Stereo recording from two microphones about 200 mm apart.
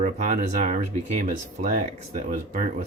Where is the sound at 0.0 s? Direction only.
40° right (ahead or behind).